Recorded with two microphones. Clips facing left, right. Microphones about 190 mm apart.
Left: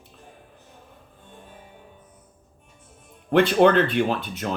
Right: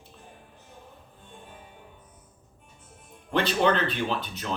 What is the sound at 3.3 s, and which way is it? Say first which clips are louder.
Speech: left 7 dB; 55° left (ahead or behind).